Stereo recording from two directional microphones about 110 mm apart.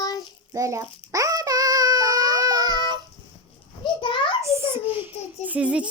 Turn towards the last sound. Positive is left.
turn(degrees=-10)  # may be behind; listen again after turning